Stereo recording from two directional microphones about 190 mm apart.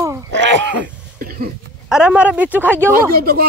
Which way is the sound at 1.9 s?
5° right (ahead or behind).